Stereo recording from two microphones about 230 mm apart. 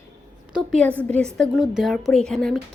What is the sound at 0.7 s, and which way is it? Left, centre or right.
A woman's voice, centre.